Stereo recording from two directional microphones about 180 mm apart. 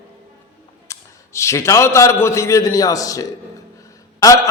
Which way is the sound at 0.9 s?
15° left (ahead or behind).